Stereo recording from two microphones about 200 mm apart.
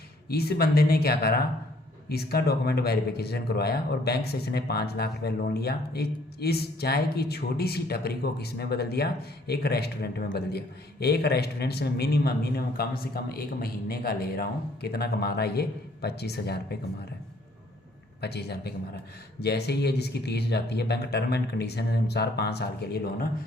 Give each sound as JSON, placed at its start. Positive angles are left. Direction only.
{"t": 0.3, "sound": "speech", "side_deg": 50}
{"t": 18.2, "sound": "speech", "side_deg": 55}